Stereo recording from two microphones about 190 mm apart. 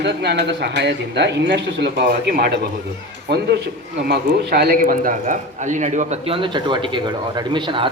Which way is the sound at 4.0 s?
55° right (ahead or behind).